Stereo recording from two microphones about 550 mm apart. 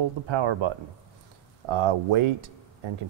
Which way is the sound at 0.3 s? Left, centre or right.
Right.